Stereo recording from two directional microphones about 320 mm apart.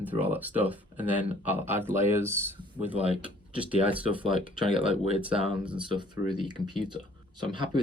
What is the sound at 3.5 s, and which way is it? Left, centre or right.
Speech, centre.